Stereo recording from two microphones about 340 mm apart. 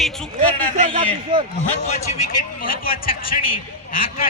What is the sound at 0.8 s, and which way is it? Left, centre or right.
Speech, centre.